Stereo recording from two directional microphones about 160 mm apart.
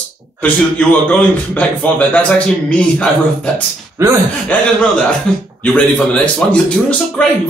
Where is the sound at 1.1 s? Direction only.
10° left (ahead or behind).